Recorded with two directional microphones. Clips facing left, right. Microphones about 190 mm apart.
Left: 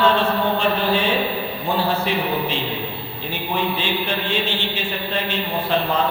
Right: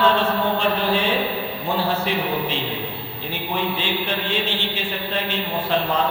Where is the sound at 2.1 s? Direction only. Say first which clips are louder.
Left 1 dB; 10° left (ahead or behind).